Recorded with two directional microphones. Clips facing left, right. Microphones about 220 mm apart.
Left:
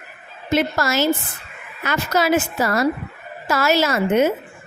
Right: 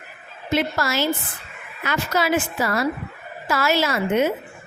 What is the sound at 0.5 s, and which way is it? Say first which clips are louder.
A woman's voice: left 3 dB; 45° left (ahead or behind).